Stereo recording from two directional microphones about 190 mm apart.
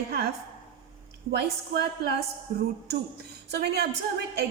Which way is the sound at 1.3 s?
60° right (ahead or behind).